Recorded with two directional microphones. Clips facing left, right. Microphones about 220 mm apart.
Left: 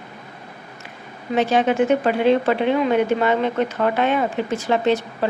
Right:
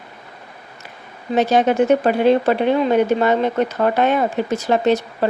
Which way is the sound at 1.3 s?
40° right (ahead or behind).